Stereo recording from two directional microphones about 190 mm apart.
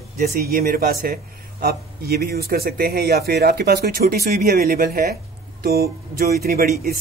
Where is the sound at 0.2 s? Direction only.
50° right (ahead or behind).